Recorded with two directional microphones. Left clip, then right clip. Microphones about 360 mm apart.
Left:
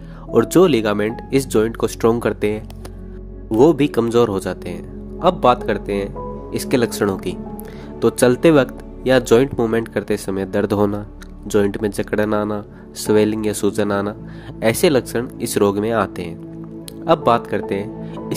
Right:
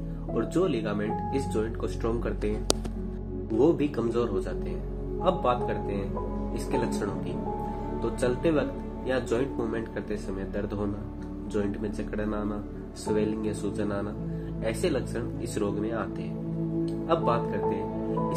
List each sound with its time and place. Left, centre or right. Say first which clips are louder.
0.3 s speech: left 14 dB; left
3.5 s speech: left 11 dB; left